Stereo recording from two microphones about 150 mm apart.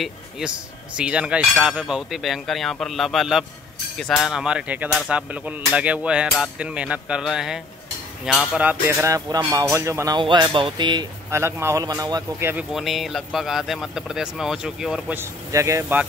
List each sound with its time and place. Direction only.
0.9 s speech: 5° right (ahead or behind)
5.0 s hammer: 10° right (ahead or behind)
6.4 s speech: 10° right (ahead or behind)
8.3 s hammer: 5° right (ahead or behind); by 9.4 s 20° right (ahead or behind)
9.5 s speech: 20° right (ahead or behind)
10.1 s speech: 30° right (ahead or behind)
11.2 s speech: 20° right (ahead or behind)
12.7 s speech: centre (ahead or behind)
15.1 s hammer: 20° right (ahead or behind)